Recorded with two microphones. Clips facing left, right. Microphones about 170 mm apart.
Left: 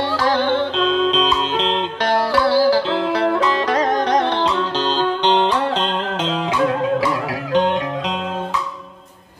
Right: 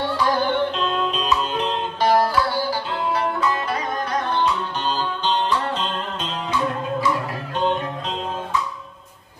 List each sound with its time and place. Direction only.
0.0 s music: 90° left